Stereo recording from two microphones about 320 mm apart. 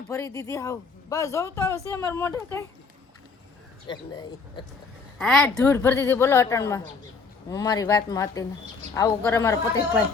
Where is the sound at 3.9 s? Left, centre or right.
Centre.